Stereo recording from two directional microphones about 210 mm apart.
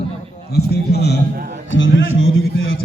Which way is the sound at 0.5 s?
50° left (ahead or behind).